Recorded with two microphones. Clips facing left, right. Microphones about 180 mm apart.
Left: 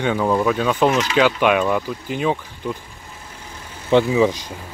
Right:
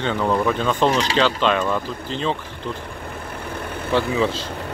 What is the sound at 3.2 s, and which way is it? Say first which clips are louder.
Vehicle: right 9 dB; 60° right (ahead or behind).